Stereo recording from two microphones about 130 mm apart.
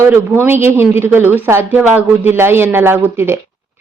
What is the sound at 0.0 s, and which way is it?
A woman's voice, 20° right (ahead or behind).